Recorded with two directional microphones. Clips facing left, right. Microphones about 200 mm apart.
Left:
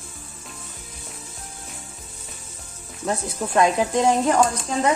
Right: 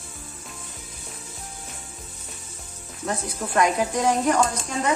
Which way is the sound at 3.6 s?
25° left (ahead or behind).